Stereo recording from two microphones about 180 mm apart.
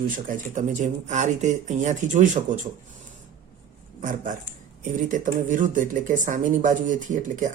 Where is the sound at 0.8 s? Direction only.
40° right (ahead or behind).